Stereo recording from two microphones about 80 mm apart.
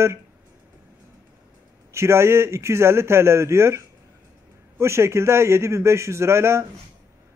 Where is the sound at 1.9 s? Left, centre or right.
Right.